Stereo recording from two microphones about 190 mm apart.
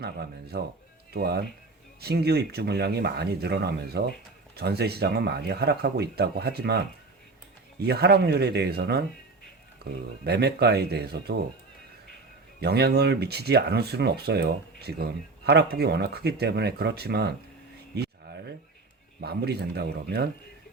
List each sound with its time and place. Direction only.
0.0 s speech: 55° right (ahead or behind)
12.5 s speech: 60° right (ahead or behind)
17.9 s a sound: 60° right (ahead or behind)
19.2 s speech: 60° right (ahead or behind)